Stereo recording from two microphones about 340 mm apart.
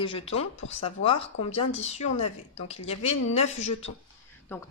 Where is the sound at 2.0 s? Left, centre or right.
Left.